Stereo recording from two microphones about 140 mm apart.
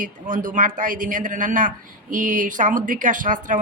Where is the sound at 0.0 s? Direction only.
70° right (ahead or behind).